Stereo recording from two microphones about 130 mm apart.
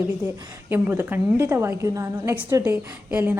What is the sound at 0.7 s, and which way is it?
A woman's voice, 15° right (ahead or behind).